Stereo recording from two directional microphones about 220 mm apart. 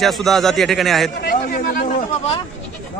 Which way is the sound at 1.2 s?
45° left (ahead or behind).